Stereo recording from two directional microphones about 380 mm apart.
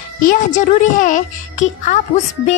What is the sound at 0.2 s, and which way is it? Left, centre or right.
A woman's voice, left.